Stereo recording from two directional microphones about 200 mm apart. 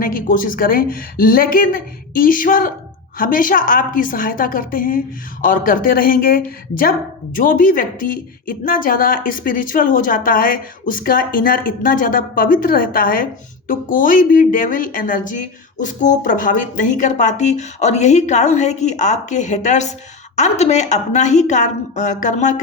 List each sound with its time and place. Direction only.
0.0 s a woman's voice: 45° left (ahead or behind)